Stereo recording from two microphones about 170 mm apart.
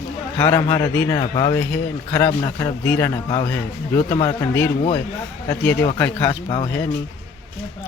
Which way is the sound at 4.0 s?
35° left (ahead or behind).